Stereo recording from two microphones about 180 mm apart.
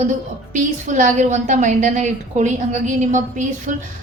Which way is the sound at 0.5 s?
45° right (ahead or behind).